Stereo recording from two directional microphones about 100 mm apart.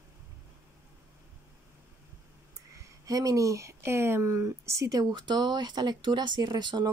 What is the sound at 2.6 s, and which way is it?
Speech, 35° right (ahead or behind).